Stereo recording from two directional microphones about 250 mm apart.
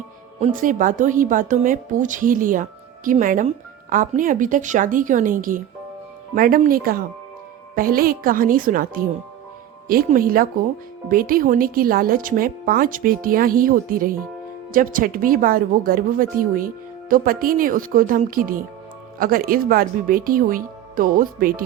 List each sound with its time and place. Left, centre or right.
0.3 s speech: right